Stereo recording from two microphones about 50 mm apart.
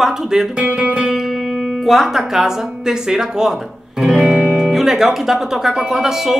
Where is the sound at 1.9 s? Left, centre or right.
Centre.